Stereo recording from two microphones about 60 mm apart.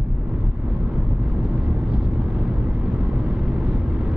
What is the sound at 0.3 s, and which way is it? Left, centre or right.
Vehicle, centre.